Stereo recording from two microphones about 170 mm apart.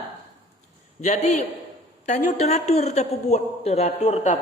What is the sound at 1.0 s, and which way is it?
A man's voice, 40° left (ahead or behind).